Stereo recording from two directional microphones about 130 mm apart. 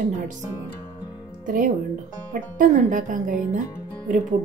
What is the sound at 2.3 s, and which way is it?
Speech, 85° right.